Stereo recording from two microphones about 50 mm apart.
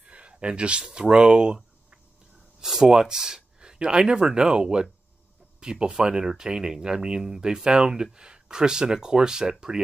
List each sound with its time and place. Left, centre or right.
0.0 s speech: right